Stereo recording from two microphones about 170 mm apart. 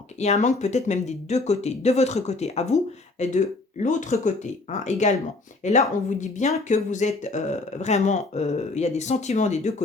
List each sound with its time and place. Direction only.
0.2 s speech: 45° left (ahead or behind)